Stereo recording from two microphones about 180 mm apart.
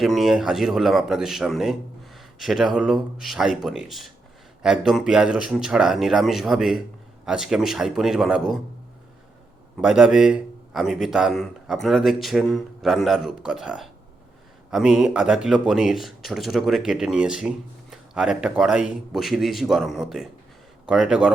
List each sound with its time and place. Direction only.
0.0 s speech: centre (ahead or behind)
9.7 s speech: 5° right (ahead or behind)